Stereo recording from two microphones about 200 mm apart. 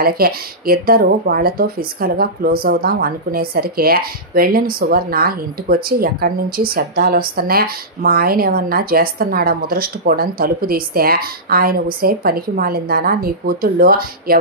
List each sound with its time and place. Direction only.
0.0 s speech: 50° right (ahead or behind)